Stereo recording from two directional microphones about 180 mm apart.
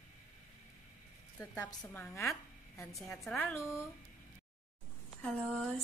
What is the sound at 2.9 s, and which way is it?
Speech, centre (ahead or behind).